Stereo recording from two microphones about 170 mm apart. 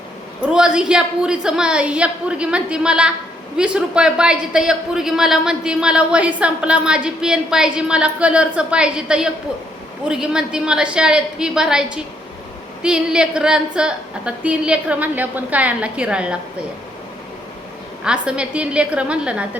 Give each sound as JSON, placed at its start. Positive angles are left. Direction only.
{"t": 0.4, "sound": "a man's voice", "side_deg": -5}
{"t": 18.0, "sound": "a woman's voice", "side_deg": -5}